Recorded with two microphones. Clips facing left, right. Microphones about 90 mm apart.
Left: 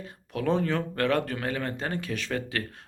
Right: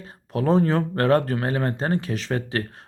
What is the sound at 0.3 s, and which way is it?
Speech, 35° right (ahead or behind).